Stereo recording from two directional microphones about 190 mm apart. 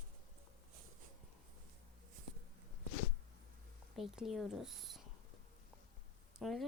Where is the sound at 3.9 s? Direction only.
Centre (ahead or behind).